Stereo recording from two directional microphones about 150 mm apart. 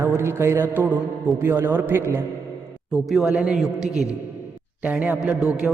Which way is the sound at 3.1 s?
5° right (ahead or behind).